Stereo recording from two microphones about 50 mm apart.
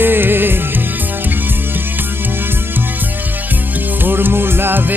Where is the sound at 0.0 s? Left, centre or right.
Right.